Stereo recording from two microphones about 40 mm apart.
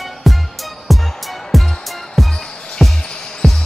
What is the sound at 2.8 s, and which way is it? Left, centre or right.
Basketball bounce, centre.